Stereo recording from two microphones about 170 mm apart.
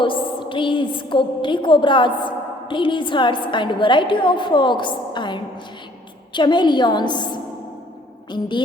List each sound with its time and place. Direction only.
0.0 s a woman's voice: 30° left (ahead or behind)
8.3 s a woman's voice: 25° left (ahead or behind)